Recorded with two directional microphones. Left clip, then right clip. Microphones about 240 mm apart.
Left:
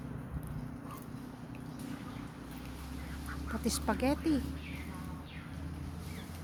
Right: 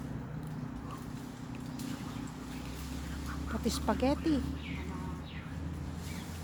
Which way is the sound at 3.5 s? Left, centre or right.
Centre.